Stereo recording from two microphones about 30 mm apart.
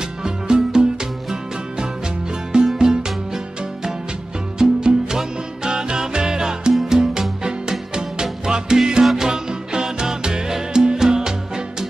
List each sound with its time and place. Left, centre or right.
0.2 s music: right
2.5 s music: right
4.6 s music: right
9.0 s music: centre
9.3 s music: right